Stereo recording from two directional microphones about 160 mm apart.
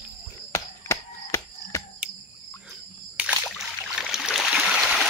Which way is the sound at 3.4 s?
Centre (ahead or behind).